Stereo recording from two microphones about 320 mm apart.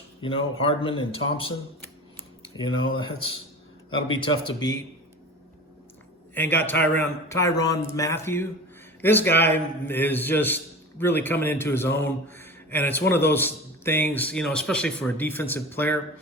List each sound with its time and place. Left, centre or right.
0.6 s a man's voice: centre
3.0 s a man's voice: centre
6.3 s a man's voice: centre